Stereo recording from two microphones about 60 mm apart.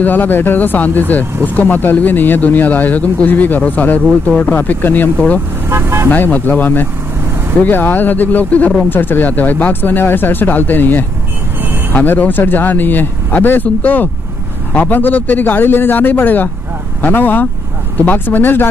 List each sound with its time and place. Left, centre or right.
0.0 s speech: left
5.7 s vehicle: right
6.0 s speech: left